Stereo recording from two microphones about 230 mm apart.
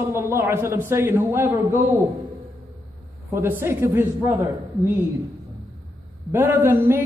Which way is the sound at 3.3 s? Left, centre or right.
Centre.